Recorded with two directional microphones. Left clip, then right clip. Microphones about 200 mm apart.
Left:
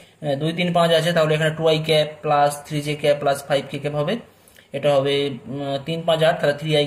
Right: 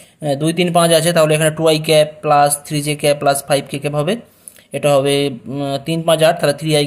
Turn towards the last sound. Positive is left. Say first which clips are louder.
# right 4 dB
turn(degrees=-45)  # may be behind; listen again after turning